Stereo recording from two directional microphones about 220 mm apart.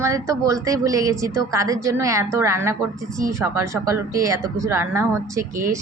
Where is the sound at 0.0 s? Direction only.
15° right (ahead or behind).